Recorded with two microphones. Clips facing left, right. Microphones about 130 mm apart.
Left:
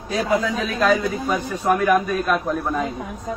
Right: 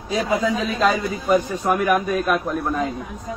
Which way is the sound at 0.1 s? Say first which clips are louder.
Even; 20° right (ahead or behind).